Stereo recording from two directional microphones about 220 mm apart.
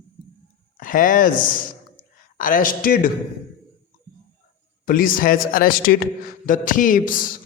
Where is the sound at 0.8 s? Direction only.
40° left (ahead or behind).